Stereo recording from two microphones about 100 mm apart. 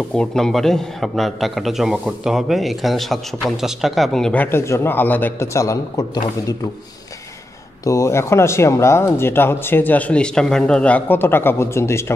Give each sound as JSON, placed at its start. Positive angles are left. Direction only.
{"t": 0.1, "sound": "a man's voice", "side_deg": 5}
{"t": 4.4, "sound": "speech", "side_deg": 25}
{"t": 5.5, "sound": "a man's voice", "side_deg": 30}
{"t": 7.8, "sound": "speech", "side_deg": 30}